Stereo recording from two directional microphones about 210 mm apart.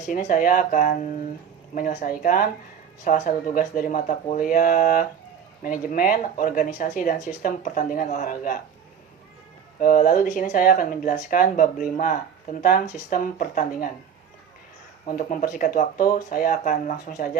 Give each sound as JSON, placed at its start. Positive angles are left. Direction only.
{"t": 0.1, "sound": "speech", "side_deg": 40}
{"t": 9.8, "sound": "speech", "side_deg": 40}
{"t": 15.0, "sound": "speech", "side_deg": 40}